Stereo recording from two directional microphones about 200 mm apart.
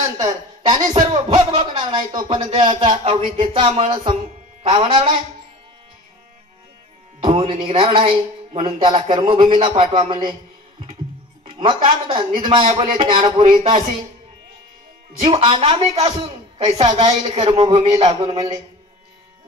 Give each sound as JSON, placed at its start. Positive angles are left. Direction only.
{"t": 0.8, "sound": "speech", "side_deg": -20}
{"t": 7.2, "sound": "speech", "side_deg": -25}
{"t": 11.4, "sound": "speech", "side_deg": -25}
{"t": 15.1, "sound": "speech", "side_deg": -25}